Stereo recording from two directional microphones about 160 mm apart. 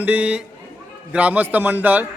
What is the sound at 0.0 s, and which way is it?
A man's voice, 10° right (ahead or behind).